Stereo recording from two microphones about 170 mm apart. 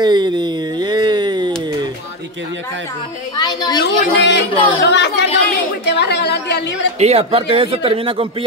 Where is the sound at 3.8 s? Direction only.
90° left.